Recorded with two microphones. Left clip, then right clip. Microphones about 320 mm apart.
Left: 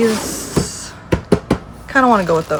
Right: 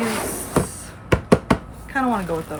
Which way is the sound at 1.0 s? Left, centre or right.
Centre.